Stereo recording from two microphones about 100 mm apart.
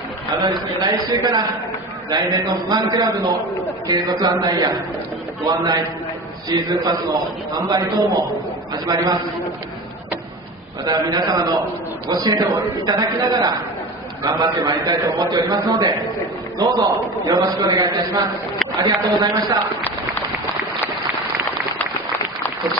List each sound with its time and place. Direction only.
0.3 s a man's voice: 40° right (ahead or behind)
10.9 s a man's voice: 40° right (ahead or behind)